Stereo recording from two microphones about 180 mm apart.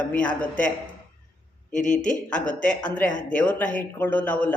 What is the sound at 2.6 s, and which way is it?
A man's voice, 10° left (ahead or behind).